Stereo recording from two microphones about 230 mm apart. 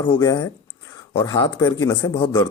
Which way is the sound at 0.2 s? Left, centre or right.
Centre.